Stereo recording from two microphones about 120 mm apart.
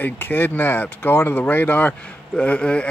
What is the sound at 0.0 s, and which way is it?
Speech, 15° left (ahead or behind).